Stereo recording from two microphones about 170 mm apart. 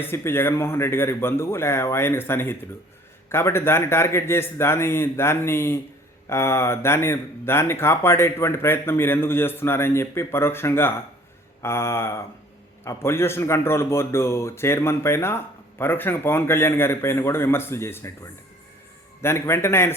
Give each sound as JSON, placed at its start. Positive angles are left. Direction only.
{"t": 0.0, "sound": "speech", "side_deg": 15}
{"t": 19.2, "sound": "speech", "side_deg": 15}